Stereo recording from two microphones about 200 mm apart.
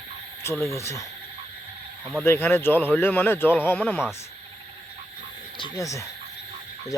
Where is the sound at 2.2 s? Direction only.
10° left (ahead or behind).